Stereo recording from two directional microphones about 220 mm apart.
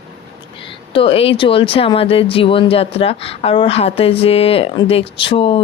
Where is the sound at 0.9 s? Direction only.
25° left (ahead or behind).